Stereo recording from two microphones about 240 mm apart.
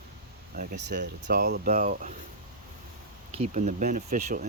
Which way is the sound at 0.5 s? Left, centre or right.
Right.